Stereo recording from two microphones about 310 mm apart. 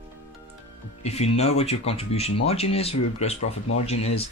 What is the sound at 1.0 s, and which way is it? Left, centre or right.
Speech, centre.